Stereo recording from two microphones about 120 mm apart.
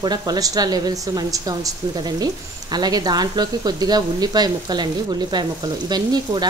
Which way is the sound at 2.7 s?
35° right (ahead or behind).